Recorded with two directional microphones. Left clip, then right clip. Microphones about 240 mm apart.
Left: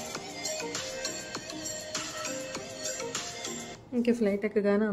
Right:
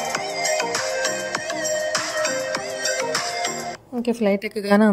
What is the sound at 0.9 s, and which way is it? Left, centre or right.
Music, centre.